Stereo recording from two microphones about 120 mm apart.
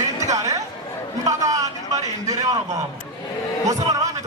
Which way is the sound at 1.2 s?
30° right (ahead or behind).